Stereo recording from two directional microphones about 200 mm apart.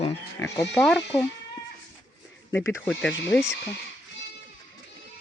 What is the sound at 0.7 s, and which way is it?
Speech, centre (ahead or behind).